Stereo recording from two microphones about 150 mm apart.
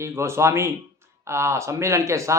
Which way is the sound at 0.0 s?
20° right (ahead or behind).